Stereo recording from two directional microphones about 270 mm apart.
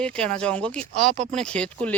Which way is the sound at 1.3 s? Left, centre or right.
Centre.